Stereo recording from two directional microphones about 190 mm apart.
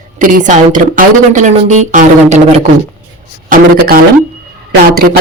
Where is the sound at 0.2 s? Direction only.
45° right (ahead or behind).